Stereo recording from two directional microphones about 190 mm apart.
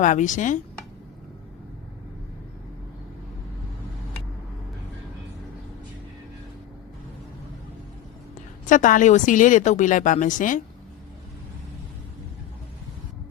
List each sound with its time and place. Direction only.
0.0 s speech: 40° left (ahead or behind)
8.6 s a woman's voice: 45° left (ahead or behind)